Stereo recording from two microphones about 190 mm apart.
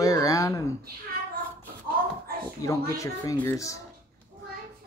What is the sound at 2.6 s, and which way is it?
Speech, 15° left (ahead or behind).